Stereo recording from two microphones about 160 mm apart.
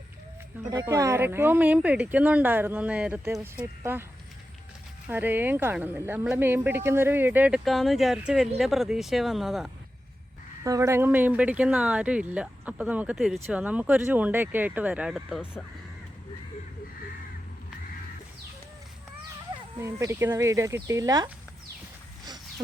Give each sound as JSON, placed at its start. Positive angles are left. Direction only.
{"t": 0.6, "sound": "speech", "side_deg": -25}
{"t": 5.0, "sound": "speech", "side_deg": -10}
{"t": 10.6, "sound": "speech", "side_deg": -20}
{"t": 19.5, "sound": "speech", "side_deg": -25}
{"t": 22.2, "sound": "wild animals", "side_deg": -25}